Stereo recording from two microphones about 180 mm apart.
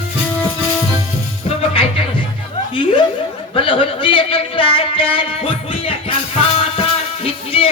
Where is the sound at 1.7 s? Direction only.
30° left (ahead or behind).